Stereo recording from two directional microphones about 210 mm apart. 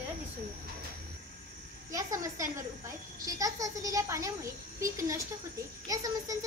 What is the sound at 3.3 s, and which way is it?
A child's voice, 15° right (ahead or behind).